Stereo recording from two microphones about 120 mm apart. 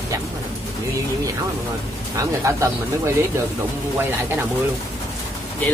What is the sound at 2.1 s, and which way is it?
Speech, 25° right (ahead or behind).